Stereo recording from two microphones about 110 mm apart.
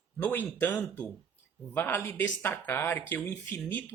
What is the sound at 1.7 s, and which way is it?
Speech, 20° left (ahead or behind).